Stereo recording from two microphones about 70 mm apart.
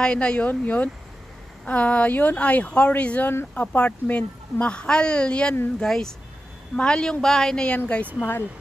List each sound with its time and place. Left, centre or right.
0.0 s a woman's voice: centre
8.2 s speech: left